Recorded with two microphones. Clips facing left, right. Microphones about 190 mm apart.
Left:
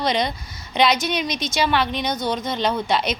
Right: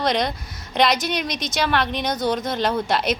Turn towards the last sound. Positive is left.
turn(degrees=0)  # may be behind; listen again after turning